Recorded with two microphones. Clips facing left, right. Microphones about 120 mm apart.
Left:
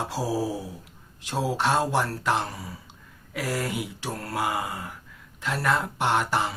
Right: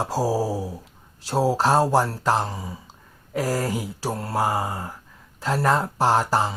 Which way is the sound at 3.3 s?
40° right (ahead or behind).